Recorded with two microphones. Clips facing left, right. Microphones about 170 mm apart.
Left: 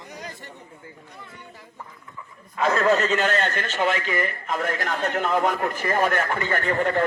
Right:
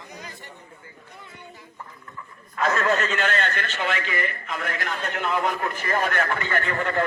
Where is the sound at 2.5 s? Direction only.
30° left (ahead or behind).